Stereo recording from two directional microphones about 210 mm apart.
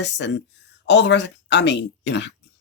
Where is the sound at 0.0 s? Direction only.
55° left (ahead or behind).